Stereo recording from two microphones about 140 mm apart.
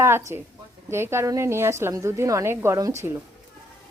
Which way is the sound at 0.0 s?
20° right (ahead or behind).